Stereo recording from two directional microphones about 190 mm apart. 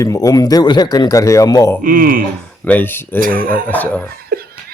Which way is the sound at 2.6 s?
10° left (ahead or behind).